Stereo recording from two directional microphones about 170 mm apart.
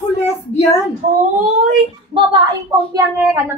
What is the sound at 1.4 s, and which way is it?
Speech, 45° right (ahead or behind).